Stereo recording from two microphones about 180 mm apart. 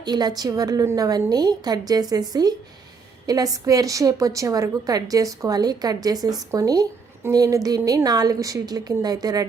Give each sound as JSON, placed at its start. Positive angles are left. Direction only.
{"t": 0.0, "sound": "a woman's voice", "side_deg": -25}